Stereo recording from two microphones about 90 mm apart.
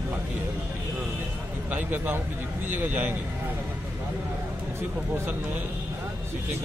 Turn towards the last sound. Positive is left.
turn(degrees=-25)  # may be behind; listen again after turning